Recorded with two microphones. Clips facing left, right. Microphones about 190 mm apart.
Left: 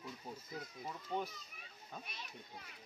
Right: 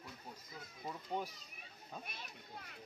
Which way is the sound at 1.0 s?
10° right (ahead or behind).